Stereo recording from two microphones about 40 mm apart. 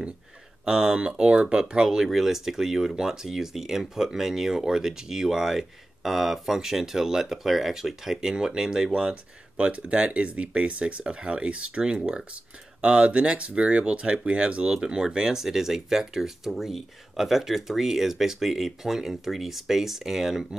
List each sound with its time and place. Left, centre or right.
0.7 s speech: centre
2.0 s speech: centre
9.6 s speech: right; by 20.4 s centre